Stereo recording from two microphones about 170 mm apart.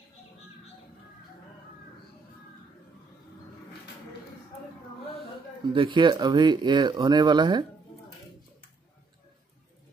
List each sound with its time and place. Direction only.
5.7 s speech: 30° right (ahead or behind)